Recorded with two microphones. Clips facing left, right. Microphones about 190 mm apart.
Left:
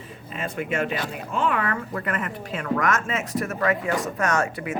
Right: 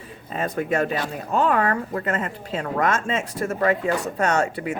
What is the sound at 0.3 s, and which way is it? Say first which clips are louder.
Speech: right 4 dB; 40° right (ahead or behind).